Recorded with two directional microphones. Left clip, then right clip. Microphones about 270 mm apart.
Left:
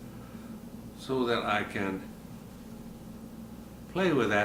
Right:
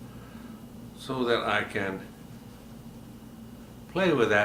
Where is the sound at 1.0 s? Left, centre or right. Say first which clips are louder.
Right 2 dB; right.